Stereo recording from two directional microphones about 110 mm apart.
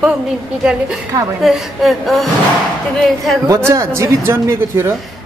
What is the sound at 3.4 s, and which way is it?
Speech, 25° right (ahead or behind).